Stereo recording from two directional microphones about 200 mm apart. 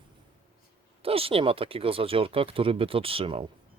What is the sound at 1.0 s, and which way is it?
Speech, 30° right (ahead or behind).